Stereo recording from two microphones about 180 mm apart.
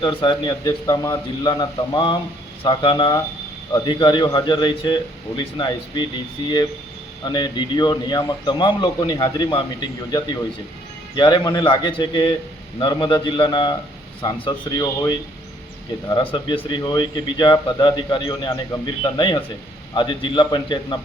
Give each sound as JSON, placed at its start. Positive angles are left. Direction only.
{"t": 0.0, "sound": "a man's voice", "side_deg": 25}
{"t": 7.3, "sound": "a man's voice", "side_deg": 25}